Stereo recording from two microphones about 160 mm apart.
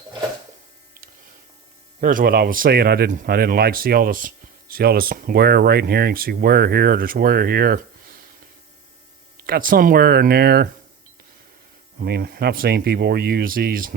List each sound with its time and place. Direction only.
2.0 s speech: 60° right (ahead or behind)
9.4 s speech: 60° right (ahead or behind); by 10.7 s 80° right
11.9 s speech: 75° right (ahead or behind)